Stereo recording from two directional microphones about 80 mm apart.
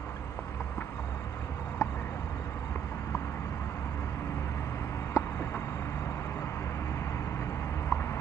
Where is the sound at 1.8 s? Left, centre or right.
Left.